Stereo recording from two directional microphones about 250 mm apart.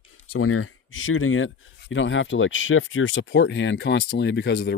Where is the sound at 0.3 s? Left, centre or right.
Left.